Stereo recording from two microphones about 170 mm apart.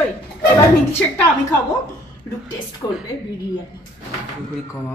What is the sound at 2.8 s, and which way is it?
Speech, 20° left (ahead or behind).